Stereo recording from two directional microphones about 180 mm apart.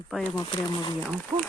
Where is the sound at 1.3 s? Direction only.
25° right (ahead or behind).